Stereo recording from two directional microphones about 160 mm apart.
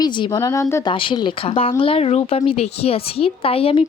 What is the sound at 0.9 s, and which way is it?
A woman's voice, 30° left (ahead or behind).